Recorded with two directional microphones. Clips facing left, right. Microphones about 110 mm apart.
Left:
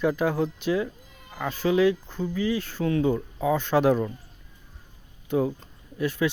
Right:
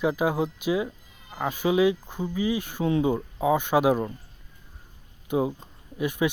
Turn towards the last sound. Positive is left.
turn(degrees=-15)  # may be behind; listen again after turning